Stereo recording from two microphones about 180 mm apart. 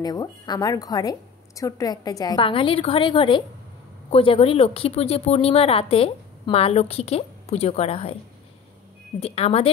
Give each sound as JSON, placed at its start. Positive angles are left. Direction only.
{"t": 0.0, "sound": "a woman's voice", "side_deg": 20}
{"t": 9.2, "sound": "speech", "side_deg": 35}